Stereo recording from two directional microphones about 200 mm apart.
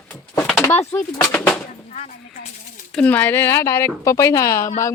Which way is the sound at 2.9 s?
5° left (ahead or behind).